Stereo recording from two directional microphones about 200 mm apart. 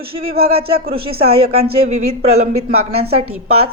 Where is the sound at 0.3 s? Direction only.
30° right (ahead or behind).